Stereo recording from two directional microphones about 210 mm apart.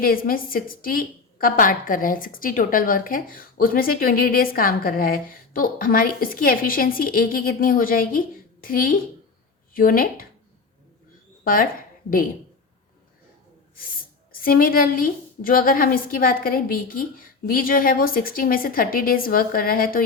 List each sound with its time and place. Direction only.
0.0 s a woman's voice: 45° left (ahead or behind)
11.4 s a woman's voice: 40° left (ahead or behind)
14.4 s a woman's voice: 45° left (ahead or behind)